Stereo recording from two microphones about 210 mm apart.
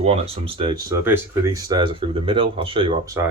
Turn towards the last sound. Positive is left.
turn(degrees=-25)  # may be behind; listen again after turning